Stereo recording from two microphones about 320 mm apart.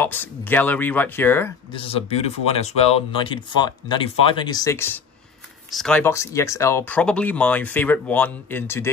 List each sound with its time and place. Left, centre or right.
0.0 s speech: centre
1.8 s speech: centre